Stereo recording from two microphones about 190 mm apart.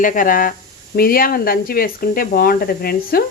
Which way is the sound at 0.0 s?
45° left (ahead or behind).